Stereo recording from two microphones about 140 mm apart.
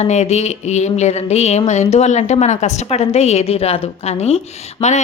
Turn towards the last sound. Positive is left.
turn(degrees=35)  # may be behind; listen again after turning